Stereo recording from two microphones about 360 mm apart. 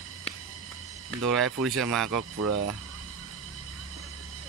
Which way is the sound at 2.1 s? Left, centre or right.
Right.